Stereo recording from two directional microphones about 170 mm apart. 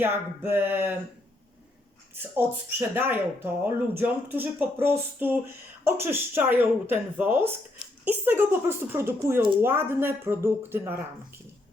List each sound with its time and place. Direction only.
0.0 s speech: 10° right (ahead or behind)
2.1 s speech: 10° right (ahead or behind)